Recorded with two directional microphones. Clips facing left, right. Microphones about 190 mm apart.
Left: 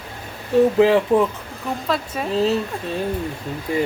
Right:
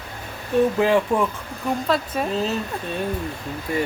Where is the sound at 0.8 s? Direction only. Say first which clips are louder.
Left 4 dB; 20° left (ahead or behind).